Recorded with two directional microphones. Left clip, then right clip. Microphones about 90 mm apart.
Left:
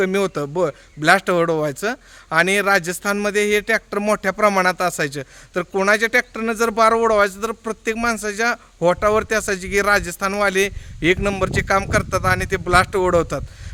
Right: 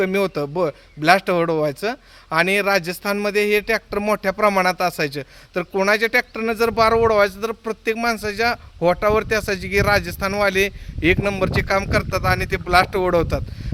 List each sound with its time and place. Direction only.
0.0 s a man's voice: 45° left (ahead or behind)